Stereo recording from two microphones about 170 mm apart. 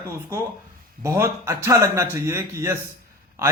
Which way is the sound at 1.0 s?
15° right (ahead or behind).